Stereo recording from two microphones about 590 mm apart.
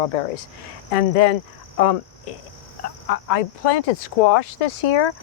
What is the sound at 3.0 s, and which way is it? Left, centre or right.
Speech, left.